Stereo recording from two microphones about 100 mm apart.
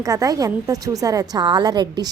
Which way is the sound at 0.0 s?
35° right (ahead or behind).